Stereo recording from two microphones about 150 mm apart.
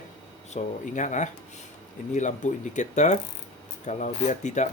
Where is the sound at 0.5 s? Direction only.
55° left (ahead or behind).